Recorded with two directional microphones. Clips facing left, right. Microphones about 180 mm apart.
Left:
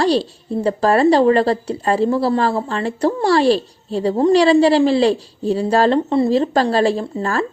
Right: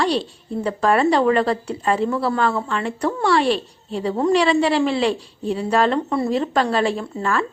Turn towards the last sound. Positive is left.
turn(degrees=35)  # may be behind; listen again after turning